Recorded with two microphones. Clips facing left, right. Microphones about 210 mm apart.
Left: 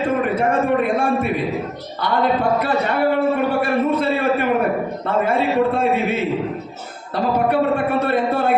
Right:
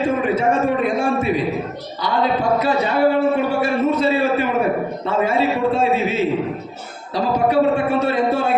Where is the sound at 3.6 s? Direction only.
55° left (ahead or behind).